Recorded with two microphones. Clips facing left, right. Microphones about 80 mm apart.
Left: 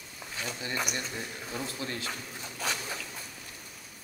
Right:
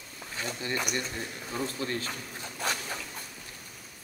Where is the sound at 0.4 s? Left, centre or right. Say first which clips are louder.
Right 1 dB; right.